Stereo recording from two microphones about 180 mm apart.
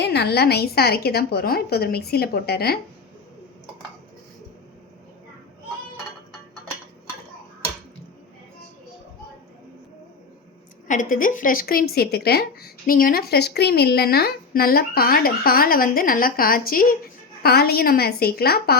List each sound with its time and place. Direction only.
0.0 s a woman's voice: 70° left (ahead or behind)
10.8 s a woman's voice: 45° left (ahead or behind)